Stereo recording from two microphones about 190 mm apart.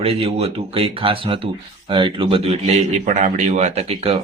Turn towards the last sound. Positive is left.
turn(degrees=-30)  # may be behind; listen again after turning